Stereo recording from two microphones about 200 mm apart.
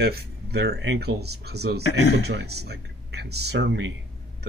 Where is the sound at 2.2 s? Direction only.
55° right (ahead or behind).